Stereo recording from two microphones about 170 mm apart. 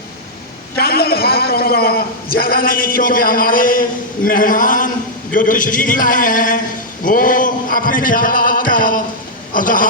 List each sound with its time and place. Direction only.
0.8 s a man's voice: 65° left (ahead or behind)